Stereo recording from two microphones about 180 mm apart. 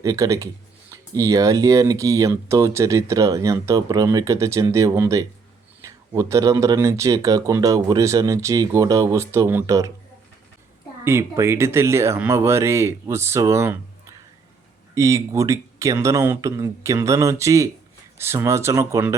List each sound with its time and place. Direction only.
0.0 s speech: 15° right (ahead or behind)
11.0 s speech: 15° right (ahead or behind)